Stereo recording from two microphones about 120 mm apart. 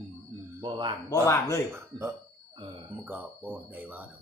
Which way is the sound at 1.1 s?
25° left (ahead or behind).